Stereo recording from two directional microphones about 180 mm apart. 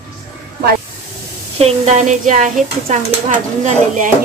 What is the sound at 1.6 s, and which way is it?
Speech, 35° right (ahead or behind).